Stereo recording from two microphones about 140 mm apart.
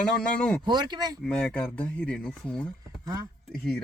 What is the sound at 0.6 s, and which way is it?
Speech, 30° right (ahead or behind).